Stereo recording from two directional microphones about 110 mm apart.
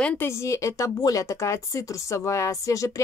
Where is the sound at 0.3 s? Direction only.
25° left (ahead or behind).